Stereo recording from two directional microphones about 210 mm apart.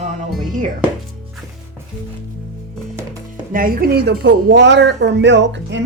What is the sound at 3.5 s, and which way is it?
Speech, 40° right (ahead or behind).